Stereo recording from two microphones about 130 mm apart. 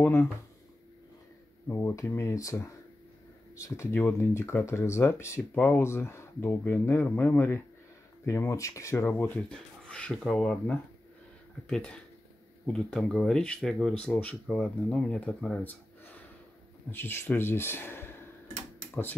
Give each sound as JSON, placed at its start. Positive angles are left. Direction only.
{"t": 0.0, "sound": "speech", "side_deg": 15}
{"t": 1.7, "sound": "speech", "side_deg": 20}
{"t": 16.9, "sound": "speech", "side_deg": 15}